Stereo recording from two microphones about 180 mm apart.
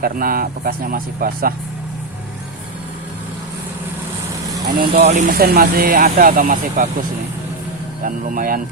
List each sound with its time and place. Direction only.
0.0 s speech: 55° right (ahead or behind)
4.8 s speech: 45° right (ahead or behind)
8.0 s speech: 45° right (ahead or behind)